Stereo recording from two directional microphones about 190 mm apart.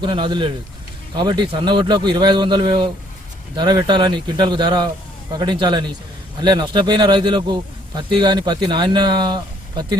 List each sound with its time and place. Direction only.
0.0 s speech: 25° right (ahead or behind)